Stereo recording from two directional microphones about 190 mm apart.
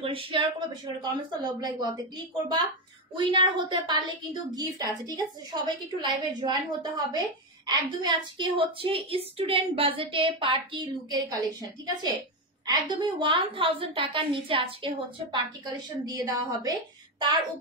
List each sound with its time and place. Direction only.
0.0 s a woman's voice: 30° right (ahead or behind)
3.2 s a woman's voice: 25° right (ahead or behind)